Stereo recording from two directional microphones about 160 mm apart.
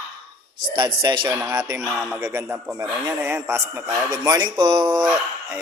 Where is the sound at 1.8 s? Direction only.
Centre (ahead or behind).